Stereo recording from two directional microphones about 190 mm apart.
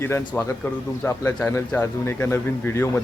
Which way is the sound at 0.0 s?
15° left (ahead or behind).